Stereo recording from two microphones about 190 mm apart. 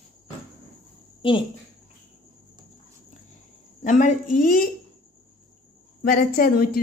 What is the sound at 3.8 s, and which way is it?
Speech, 45° left (ahead or behind).